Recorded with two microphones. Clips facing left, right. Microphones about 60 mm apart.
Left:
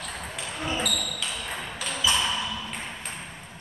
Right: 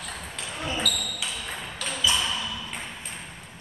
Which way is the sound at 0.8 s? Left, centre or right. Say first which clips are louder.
Even; left.